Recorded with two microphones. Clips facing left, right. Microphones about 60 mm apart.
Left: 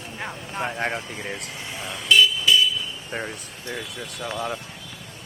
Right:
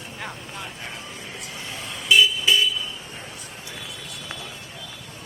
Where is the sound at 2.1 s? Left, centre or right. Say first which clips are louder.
Even; centre.